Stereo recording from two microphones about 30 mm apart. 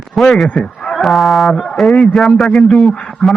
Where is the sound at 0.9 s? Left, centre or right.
Centre.